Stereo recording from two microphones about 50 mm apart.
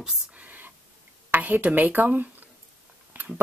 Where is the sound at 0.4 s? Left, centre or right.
Right.